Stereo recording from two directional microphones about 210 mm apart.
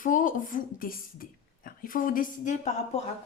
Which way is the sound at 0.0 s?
40° left (ahead or behind).